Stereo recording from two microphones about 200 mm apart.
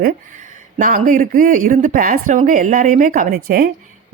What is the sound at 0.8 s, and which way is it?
Speech, 40° right (ahead or behind).